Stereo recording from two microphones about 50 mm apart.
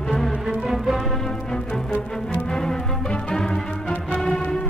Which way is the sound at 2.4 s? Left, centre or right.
Centre.